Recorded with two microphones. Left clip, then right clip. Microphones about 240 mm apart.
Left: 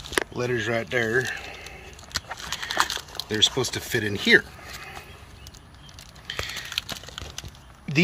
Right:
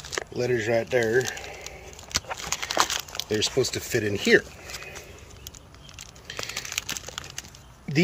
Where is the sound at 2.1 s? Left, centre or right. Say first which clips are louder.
Right 2 dB; right.